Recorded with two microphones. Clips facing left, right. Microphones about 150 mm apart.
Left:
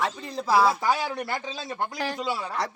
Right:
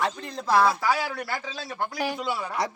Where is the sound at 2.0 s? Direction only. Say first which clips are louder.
Right 2 dB; 10° right (ahead or behind).